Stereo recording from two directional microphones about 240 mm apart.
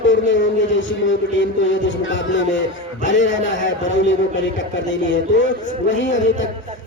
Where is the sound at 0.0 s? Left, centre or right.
Left.